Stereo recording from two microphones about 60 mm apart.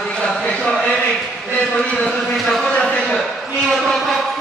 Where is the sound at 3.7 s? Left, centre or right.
Centre.